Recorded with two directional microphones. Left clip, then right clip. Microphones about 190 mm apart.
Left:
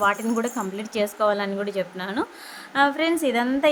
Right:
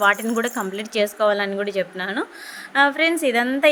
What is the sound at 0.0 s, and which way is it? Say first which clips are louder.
A woman's voice: right 4 dB; 20° right (ahead or behind).